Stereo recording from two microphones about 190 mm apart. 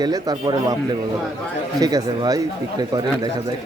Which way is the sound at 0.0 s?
20° right (ahead or behind).